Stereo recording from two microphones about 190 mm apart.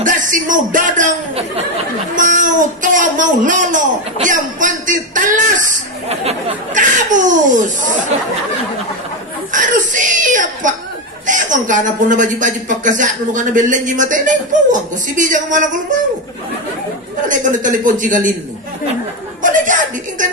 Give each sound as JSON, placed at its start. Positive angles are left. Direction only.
{"t": 0.0, "sound": "speech", "side_deg": -45}
{"t": 9.5, "sound": "speech", "side_deg": -45}
{"t": 17.2, "sound": "speech", "side_deg": -45}
{"t": 19.4, "sound": "speech", "side_deg": -45}